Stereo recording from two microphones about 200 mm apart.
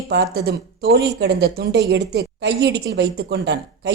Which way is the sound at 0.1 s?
55° right (ahead or behind).